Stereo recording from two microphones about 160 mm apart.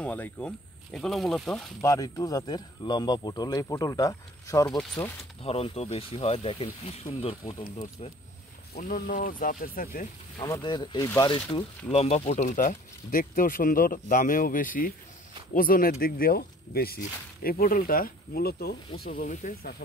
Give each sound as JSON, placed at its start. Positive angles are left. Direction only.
{"t": 0.0, "sound": "speech", "side_deg": 10}
{"t": 1.8, "sound": "speech", "side_deg": 20}
{"t": 5.4, "sound": "speech", "side_deg": 40}
{"t": 8.7, "sound": "speech", "side_deg": 60}
{"t": 10.4, "sound": "speech", "side_deg": 25}
{"t": 11.9, "sound": "speech", "side_deg": 40}
{"t": 18.9, "sound": "speech", "side_deg": 65}